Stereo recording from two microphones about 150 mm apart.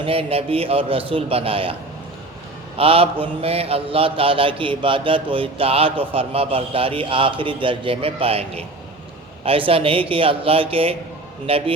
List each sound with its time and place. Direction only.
0.0 s mantra: 40° right (ahead or behind)
2.7 s mantra: 40° right (ahead or behind)